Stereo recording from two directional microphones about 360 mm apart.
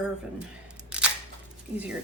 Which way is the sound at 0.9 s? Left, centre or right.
Centre.